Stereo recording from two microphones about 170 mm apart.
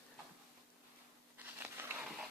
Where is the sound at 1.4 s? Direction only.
10° right (ahead or behind).